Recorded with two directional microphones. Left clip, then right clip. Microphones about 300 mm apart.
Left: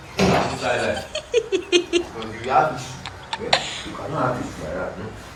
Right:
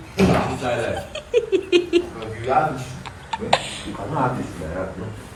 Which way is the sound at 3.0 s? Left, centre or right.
Centre.